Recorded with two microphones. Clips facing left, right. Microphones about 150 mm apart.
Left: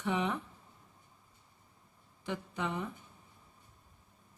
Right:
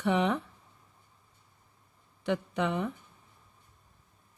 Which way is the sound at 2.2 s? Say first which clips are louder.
Right 7 dB; 70° right (ahead or behind).